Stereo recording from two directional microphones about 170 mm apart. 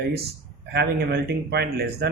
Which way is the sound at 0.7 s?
75° right (ahead or behind).